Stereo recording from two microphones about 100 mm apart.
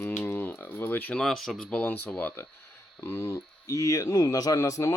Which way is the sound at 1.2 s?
5° left (ahead or behind).